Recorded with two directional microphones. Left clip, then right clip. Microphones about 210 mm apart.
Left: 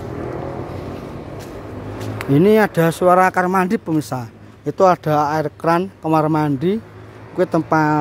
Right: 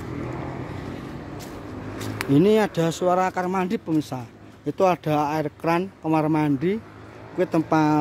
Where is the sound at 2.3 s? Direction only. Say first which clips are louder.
Left 5 dB; 15° left (ahead or behind).